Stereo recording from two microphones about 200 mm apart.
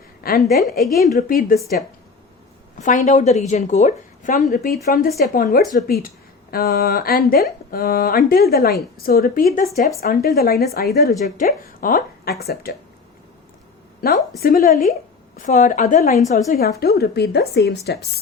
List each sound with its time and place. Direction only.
0.2 s a woman's voice: 50° left (ahead or behind)
2.8 s a woman's voice: 40° left (ahead or behind)
14.0 s a woman's voice: 50° left (ahead or behind)